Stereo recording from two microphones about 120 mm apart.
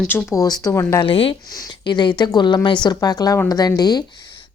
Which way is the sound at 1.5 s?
35° left (ahead or behind).